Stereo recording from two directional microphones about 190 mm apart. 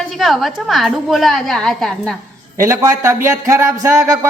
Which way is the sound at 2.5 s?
15° right (ahead or behind).